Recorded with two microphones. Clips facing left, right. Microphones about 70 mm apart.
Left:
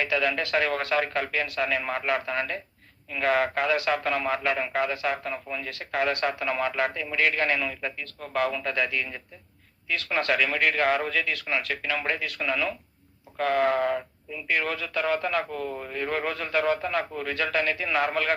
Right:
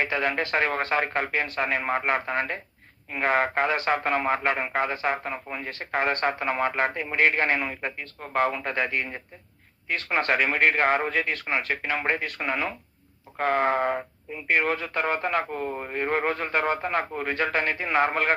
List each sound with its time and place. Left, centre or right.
0.0 s speech: right